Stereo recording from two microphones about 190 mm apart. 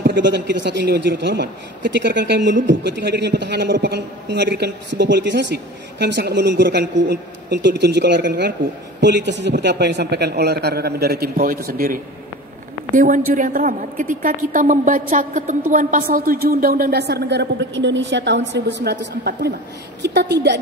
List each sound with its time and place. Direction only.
0.0 s a man's voice: 65° right (ahead or behind)